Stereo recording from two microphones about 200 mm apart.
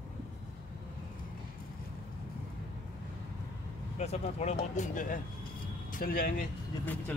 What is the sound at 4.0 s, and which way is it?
Speech, 35° left (ahead or behind).